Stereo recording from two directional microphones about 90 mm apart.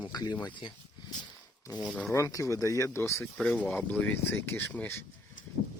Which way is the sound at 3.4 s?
5° left (ahead or behind).